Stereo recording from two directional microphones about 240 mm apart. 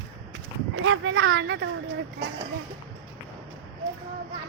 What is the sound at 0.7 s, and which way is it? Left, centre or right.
Speech, right.